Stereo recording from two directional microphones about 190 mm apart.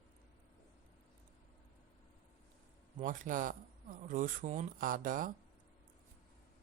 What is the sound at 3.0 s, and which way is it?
Speech, 45° right (ahead or behind).